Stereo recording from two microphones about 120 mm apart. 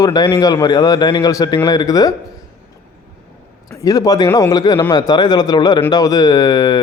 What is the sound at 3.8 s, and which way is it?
A man's voice, 30° left (ahead or behind).